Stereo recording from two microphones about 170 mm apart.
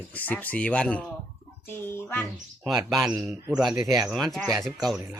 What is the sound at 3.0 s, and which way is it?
A man's voice, 10° right (ahead or behind).